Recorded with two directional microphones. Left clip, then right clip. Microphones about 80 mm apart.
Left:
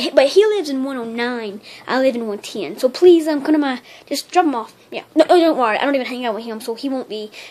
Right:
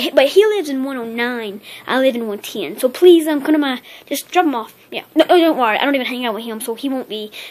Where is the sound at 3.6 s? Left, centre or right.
Centre.